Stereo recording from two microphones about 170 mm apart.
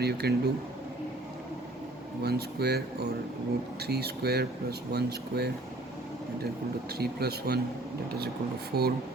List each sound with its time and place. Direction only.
0.0 s speech: 70° right (ahead or behind)
2.2 s speech: 70° right (ahead or behind)
7.0 s speech: 65° right (ahead or behind)
8.7 s speech: 65° right (ahead or behind)